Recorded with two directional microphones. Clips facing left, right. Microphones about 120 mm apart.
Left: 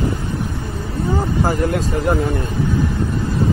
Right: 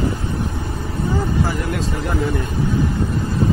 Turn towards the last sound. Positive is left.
turn(degrees=45)  # may be behind; listen again after turning